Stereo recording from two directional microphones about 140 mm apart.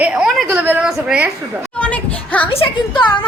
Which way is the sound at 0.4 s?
15° right (ahead or behind).